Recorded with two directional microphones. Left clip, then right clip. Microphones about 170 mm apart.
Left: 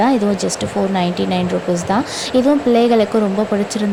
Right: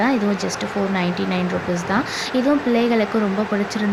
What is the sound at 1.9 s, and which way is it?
Speech, 35° left (ahead or behind).